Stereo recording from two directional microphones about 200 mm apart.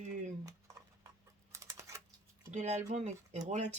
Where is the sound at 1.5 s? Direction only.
15° right (ahead or behind).